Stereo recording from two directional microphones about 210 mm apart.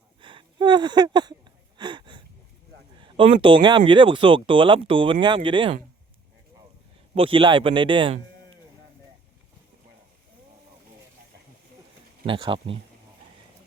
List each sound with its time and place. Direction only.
0.2 s a sound: 25° right (ahead or behind)
1.8 s wheeze: 20° right (ahead or behind)
3.0 s speech: 25° right (ahead or behind)
7.2 s speech: 25° right (ahead or behind)
12.2 s speech: 25° right (ahead or behind)